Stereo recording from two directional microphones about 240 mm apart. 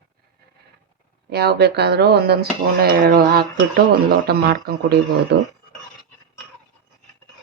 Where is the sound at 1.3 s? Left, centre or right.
Right.